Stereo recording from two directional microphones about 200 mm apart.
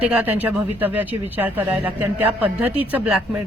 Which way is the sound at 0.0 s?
5° right (ahead or behind).